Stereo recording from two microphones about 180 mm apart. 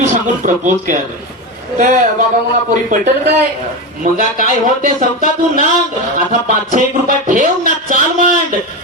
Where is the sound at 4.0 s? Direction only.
50° right (ahead or behind).